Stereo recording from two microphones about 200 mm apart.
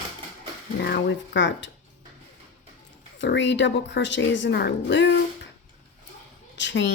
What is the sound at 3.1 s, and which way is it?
Speech, 60° left (ahead or behind).